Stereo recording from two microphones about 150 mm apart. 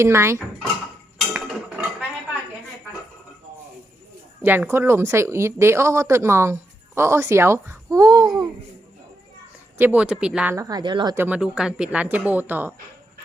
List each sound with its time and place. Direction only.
0.0 s speech: 15° right (ahead or behind)
1.3 s cutlery: 10° right (ahead or behind)
4.4 s speech: 15° right (ahead or behind)
9.7 s speech: 10° right (ahead or behind)
10.5 s speech: 25° right (ahead or behind)
11.1 s speech: 10° right (ahead or behind)